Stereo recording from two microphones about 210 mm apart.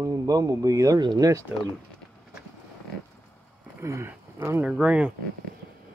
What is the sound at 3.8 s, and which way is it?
Speech, 15° right (ahead or behind).